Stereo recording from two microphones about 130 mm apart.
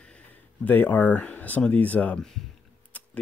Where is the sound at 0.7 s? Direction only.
15° left (ahead or behind).